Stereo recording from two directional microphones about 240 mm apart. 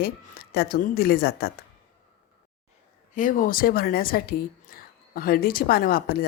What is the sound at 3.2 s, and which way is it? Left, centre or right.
Speech, left.